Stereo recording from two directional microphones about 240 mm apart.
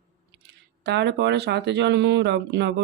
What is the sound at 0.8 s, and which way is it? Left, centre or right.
Speech, right.